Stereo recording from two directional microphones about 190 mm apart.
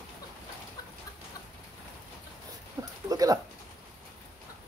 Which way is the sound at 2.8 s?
20° right (ahead or behind).